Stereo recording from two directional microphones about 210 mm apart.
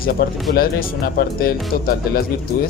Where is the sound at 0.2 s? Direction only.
50° left (ahead or behind).